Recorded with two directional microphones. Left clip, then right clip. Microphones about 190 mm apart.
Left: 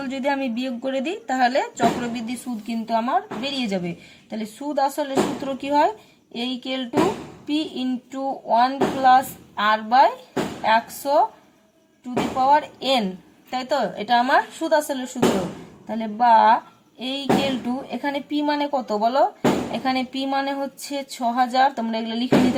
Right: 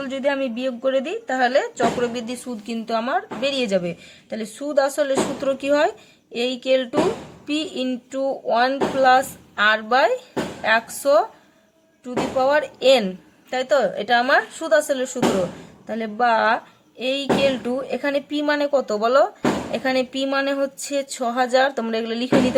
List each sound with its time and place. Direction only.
0.0 s a woman's voice: 10° right (ahead or behind); by 11.2 s 30° right (ahead or behind)
12.4 s a woman's voice: 30° right (ahead or behind)